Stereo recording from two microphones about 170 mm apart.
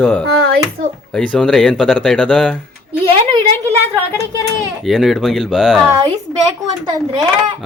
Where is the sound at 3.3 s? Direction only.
25° right (ahead or behind).